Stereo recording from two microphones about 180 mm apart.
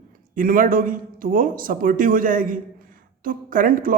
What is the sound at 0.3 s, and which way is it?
A man's voice, 50° right (ahead or behind).